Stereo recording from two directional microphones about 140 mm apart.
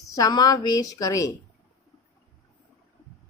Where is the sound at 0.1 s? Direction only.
25° left (ahead or behind).